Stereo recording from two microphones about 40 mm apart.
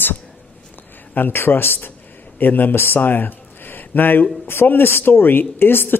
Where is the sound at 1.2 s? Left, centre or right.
Left.